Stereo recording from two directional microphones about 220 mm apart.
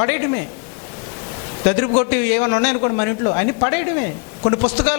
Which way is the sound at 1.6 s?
20° left (ahead or behind).